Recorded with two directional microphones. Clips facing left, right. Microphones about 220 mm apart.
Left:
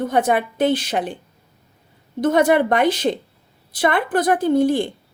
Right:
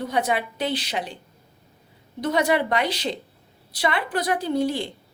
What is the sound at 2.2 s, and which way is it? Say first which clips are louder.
Speech: left 6 dB; 50° left (ahead or behind).